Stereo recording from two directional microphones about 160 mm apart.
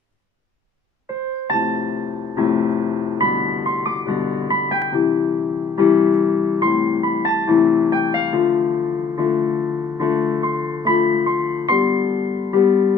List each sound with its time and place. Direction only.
2.4 s keyboard: 20° right (ahead or behind)
3.8 s piano: 25° right (ahead or behind)